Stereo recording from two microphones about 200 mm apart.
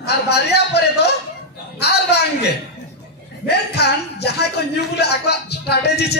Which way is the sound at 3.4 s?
55° left (ahead or behind).